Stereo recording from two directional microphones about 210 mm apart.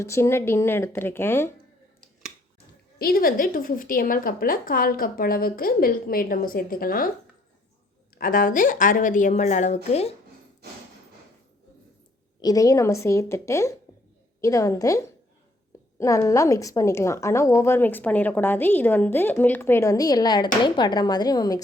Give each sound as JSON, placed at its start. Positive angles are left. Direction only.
{"t": 0.0, "sound": "a woman's voice", "side_deg": 10}
{"t": 3.0, "sound": "a woman's voice", "side_deg": 45}
{"t": 8.2, "sound": "a woman's voice", "side_deg": 40}
{"t": 12.4, "sound": "a woman's voice", "side_deg": 15}